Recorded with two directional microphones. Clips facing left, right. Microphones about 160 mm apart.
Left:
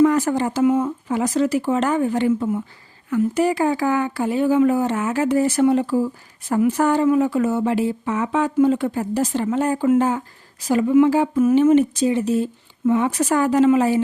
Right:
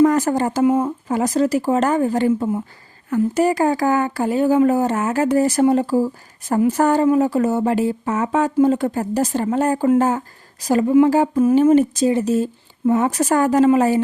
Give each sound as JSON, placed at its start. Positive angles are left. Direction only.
{"t": 0.0, "sound": "speech", "side_deg": -40}
{"t": 0.6, "sound": "speech", "side_deg": -30}
{"t": 1.1, "sound": "speech", "side_deg": -40}